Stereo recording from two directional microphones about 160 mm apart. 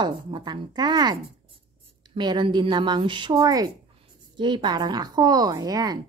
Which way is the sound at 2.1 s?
30° right (ahead or behind).